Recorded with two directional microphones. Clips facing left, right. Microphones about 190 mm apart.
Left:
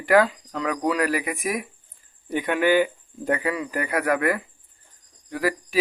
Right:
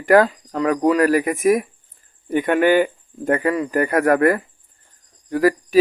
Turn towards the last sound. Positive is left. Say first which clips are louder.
# right 8 dB
turn(degrees=-45)  # may be behind; listen again after turning